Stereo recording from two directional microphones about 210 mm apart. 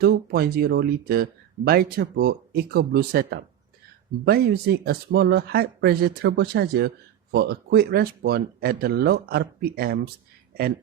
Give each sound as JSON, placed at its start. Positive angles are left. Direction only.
{"t": 0.0, "sound": "speech", "side_deg": -50}